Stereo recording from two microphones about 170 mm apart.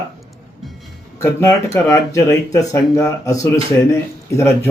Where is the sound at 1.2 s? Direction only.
15° left (ahead or behind).